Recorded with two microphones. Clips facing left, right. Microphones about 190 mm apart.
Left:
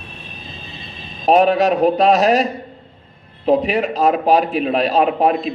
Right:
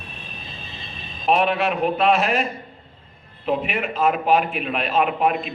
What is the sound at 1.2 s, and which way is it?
A man's voice, 40° left (ahead or behind).